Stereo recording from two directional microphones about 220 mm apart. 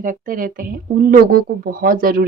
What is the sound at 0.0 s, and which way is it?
Speech, 40° right (ahead or behind).